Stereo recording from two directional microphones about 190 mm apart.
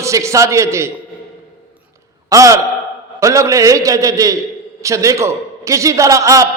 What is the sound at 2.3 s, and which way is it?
A man's voice, 15° right (ahead or behind).